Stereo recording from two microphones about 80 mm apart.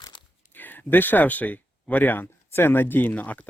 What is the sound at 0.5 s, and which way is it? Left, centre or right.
Speech, left.